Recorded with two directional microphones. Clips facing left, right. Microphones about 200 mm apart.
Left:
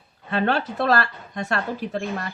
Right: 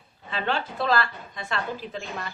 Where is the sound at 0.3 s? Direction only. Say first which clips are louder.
Left 6 dB; 55° left (ahead or behind).